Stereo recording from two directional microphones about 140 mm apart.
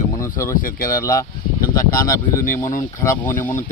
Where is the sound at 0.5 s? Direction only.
85° left.